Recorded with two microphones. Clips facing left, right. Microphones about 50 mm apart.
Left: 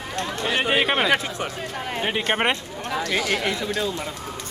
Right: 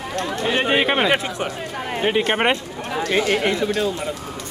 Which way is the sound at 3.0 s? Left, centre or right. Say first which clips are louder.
Right 5 dB; right.